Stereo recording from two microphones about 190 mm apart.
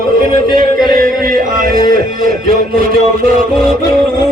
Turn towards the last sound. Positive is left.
turn(degrees=-45)  # may be behind; listen again after turning